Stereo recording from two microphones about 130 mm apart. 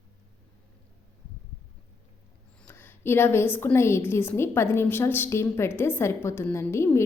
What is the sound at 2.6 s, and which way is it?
A woman's voice, 15° left (ahead or behind).